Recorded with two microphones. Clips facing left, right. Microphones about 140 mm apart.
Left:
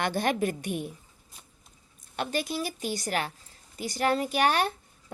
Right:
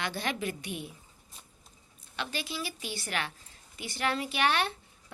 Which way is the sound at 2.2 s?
45° left (ahead or behind).